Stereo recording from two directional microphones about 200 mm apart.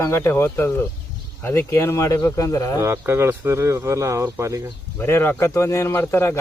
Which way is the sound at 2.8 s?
10° right (ahead or behind).